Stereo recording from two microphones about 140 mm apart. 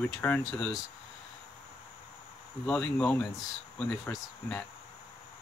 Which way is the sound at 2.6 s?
10° left (ahead or behind).